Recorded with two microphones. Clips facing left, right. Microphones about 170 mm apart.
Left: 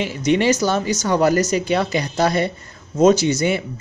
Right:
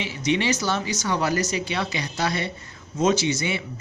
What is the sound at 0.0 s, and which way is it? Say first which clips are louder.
Speech: left 6 dB; 45° left (ahead or behind).